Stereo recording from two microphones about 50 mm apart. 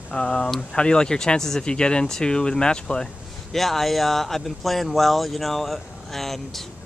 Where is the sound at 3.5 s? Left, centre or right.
Centre.